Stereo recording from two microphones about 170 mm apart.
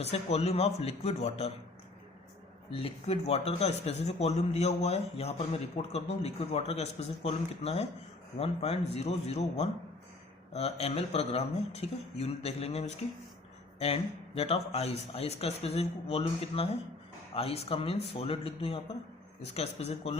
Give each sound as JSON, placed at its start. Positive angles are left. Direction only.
{"t": 0.0, "sound": "a man's voice", "side_deg": 35}
{"t": 2.6, "sound": "a man's voice", "side_deg": 30}